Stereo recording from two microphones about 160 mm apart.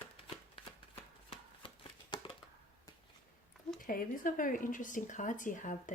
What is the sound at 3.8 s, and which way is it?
Speech, 60° left (ahead or behind).